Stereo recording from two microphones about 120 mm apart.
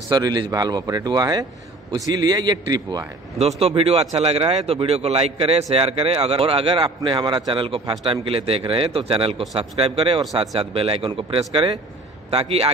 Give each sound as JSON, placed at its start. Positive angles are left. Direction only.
{"t": 0.1, "sound": "speech", "side_deg": -35}
{"t": 3.3, "sound": "a man's voice", "side_deg": -60}